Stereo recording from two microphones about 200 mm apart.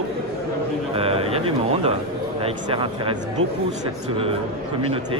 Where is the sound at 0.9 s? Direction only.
30° right (ahead or behind).